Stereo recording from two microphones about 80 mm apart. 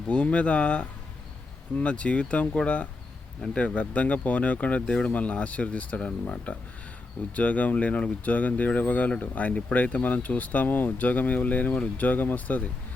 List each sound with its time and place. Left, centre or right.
0.1 s speech: centre